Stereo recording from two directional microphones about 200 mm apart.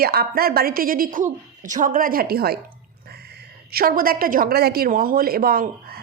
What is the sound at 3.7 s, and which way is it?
A woman's voice, 45° right (ahead or behind).